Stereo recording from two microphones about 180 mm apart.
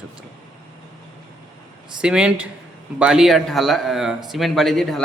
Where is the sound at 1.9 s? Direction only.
5° right (ahead or behind).